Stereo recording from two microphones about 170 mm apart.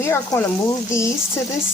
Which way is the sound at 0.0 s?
15° left (ahead or behind).